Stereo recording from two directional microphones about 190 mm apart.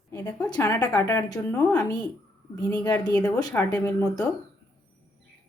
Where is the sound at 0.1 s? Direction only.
20° left (ahead or behind).